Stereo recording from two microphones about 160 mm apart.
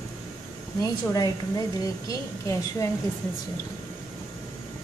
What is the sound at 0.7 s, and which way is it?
A woman's voice, 25° left (ahead or behind).